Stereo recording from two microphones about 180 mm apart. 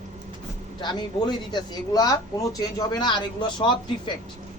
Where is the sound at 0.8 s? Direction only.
25° left (ahead or behind).